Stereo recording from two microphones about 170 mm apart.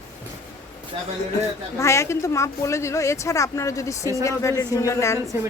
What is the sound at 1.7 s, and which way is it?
Speech, 15° left (ahead or behind).